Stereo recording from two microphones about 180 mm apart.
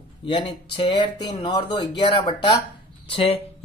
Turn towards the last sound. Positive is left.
turn(degrees=30)  # may be behind; listen again after turning